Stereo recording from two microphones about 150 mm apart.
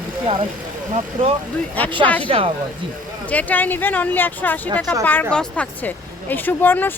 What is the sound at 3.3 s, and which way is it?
Speech, 10° left (ahead or behind).